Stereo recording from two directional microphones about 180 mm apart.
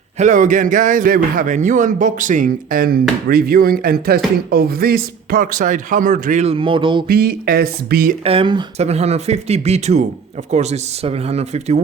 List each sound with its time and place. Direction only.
0.2 s a man's voice: 45° right (ahead or behind)
6.4 s speech: 30° right (ahead or behind)
7.1 s speech: 60° right (ahead or behind)
8.2 s speech: 30° right (ahead or behind)